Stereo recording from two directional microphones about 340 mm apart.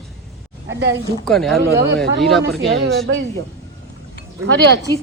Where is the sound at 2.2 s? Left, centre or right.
Centre.